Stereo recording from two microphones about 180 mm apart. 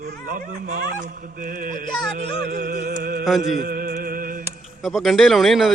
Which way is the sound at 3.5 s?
55° right (ahead or behind).